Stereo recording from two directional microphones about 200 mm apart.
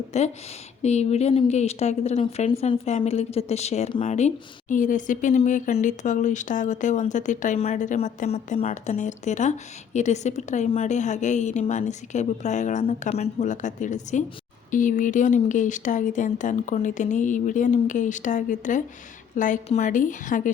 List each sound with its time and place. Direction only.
0.1 s speech: 35° left (ahead or behind)